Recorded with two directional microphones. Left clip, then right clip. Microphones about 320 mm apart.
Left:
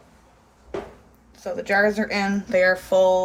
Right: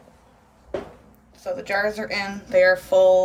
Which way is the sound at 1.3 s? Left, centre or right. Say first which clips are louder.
Left 3 dB; left.